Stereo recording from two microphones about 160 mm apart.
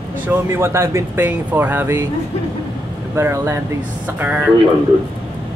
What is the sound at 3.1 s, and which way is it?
Speech, 15° right (ahead or behind).